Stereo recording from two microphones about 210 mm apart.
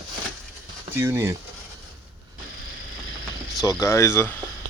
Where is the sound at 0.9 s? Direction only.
10° right (ahead or behind).